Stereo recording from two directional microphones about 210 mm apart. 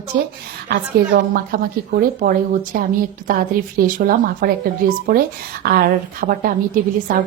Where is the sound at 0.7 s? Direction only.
50° right (ahead or behind).